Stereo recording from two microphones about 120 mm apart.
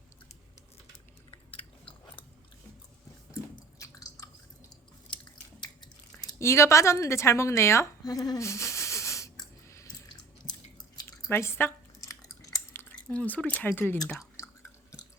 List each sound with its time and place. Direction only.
3.5 s chewing: 25° left (ahead or behind)
5.1 s chewing: 40° left (ahead or behind)
6.4 s speech: 25° left (ahead or behind)
11.3 s squish: 20° left (ahead or behind)
13.1 s speech: 15° left (ahead or behind)
14.2 s chewing: 25° left (ahead or behind)